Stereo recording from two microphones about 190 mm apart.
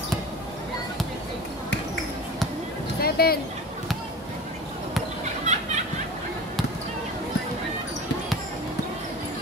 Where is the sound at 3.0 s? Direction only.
55° left (ahead or behind).